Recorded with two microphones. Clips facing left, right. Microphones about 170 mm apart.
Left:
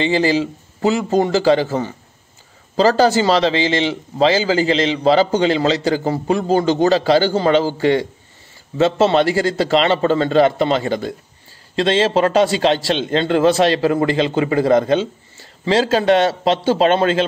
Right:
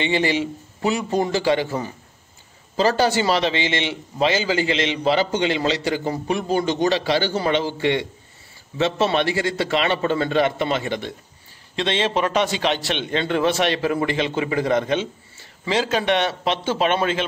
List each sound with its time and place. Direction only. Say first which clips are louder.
0.0 s a man's voice: left 5 dB; 35° left (ahead or behind)